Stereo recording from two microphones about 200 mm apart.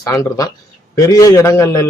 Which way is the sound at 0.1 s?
15° left (ahead or behind).